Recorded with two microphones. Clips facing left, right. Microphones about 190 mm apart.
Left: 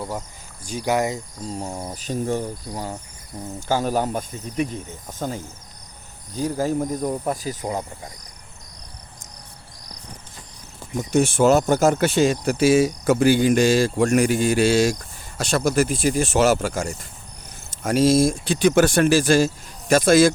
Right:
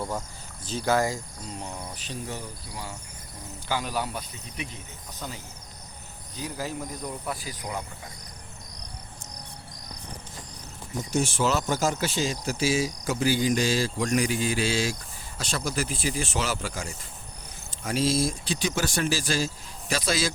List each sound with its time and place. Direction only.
0.6 s speech: 15° left (ahead or behind)
1.4 s speech: 35° left (ahead or behind)
11.1 s speech: 60° left (ahead or behind)
15.4 s speech: 70° left (ahead or behind); by 20.3 s 50° left (ahead or behind)